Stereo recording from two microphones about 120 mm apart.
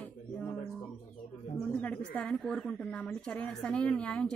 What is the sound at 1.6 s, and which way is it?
Speech, 10° left (ahead or behind).